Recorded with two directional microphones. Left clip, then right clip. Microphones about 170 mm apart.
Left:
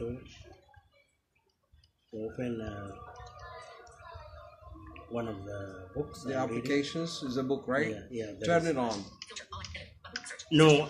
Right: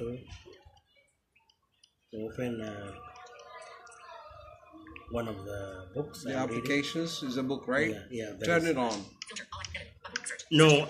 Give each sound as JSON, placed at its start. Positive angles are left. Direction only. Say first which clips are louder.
{"t": 2.3, "sound": "speech", "louder": "right 1 dB", "side_deg": -10}
{"t": 5.1, "sound": "speech", "louder": "right 1 dB", "side_deg": -5}
{"t": 6.2, "sound": "speech", "louder": "even", "side_deg": 15}
{"t": 7.9, "sound": "speech", "louder": "even", "side_deg": -5}
{"t": 8.4, "sound": "speech", "louder": "even", "side_deg": 15}
{"t": 8.8, "sound": "typing", "louder": "right 2 dB", "side_deg": -10}